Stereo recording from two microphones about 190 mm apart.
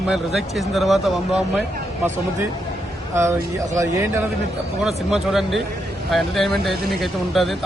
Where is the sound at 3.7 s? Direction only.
15° right (ahead or behind).